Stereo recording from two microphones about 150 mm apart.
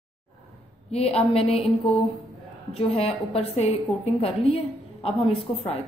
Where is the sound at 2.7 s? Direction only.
40° left (ahead or behind).